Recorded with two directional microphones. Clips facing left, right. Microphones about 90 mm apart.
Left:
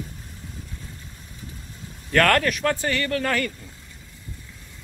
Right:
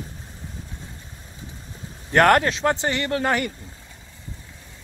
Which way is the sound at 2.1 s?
25° right (ahead or behind).